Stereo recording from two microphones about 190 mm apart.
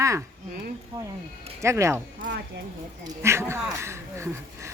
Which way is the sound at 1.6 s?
15° right (ahead or behind).